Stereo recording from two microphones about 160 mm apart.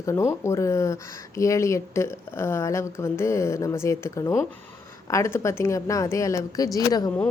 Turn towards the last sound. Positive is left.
turn(degrees=25)  # may be behind; listen again after turning